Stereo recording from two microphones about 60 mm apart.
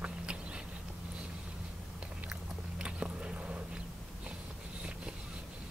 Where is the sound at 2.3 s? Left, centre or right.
Centre.